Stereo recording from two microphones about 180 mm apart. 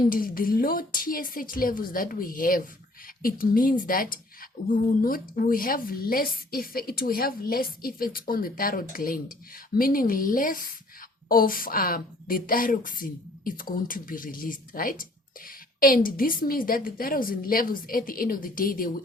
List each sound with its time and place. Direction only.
0.1 s a woman's voice: 55° left (ahead or behind)